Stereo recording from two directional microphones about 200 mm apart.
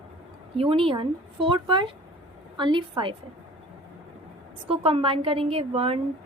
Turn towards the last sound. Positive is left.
turn(degrees=-30)  # may be behind; listen again after turning